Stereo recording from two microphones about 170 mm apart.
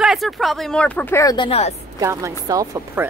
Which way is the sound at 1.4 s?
35° left (ahead or behind).